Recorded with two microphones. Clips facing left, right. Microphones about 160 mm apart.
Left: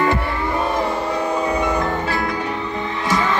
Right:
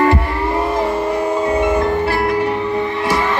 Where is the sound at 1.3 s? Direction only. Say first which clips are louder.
Right 4 dB; 25° right (ahead or behind).